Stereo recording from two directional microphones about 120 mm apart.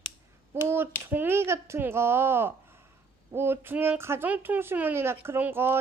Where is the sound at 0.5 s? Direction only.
20° right (ahead or behind).